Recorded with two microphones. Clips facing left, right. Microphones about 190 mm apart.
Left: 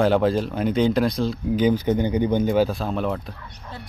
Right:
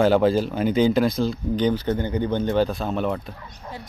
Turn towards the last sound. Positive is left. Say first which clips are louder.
# even
turn(degrees=0)  # may be behind; listen again after turning